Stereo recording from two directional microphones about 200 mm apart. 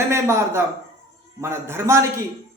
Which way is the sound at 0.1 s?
15° right (ahead or behind).